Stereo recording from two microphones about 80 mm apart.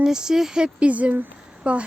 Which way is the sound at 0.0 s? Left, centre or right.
Centre.